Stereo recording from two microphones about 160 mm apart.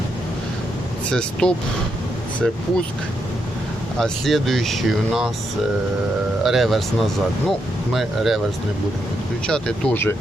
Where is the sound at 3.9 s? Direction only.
Centre (ahead or behind).